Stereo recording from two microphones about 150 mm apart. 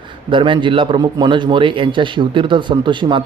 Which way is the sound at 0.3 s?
35° right (ahead or behind).